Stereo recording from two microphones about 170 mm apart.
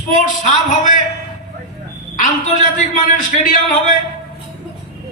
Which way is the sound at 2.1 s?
50° left (ahead or behind).